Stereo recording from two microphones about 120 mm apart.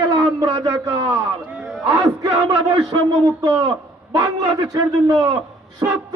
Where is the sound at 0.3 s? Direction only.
30° right (ahead or behind).